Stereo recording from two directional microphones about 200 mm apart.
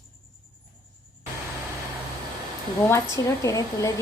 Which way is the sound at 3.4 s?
15° left (ahead or behind).